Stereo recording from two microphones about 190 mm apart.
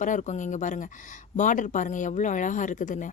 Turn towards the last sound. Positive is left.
turn(degrees=40)  # may be behind; listen again after turning